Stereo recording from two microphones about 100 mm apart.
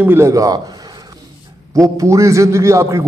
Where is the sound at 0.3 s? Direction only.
35° right (ahead or behind).